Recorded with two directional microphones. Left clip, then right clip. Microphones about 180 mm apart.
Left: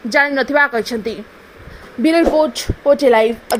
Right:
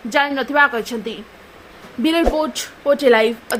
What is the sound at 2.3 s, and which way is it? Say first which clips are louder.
Speech: left 6 dB; 10° left (ahead or behind).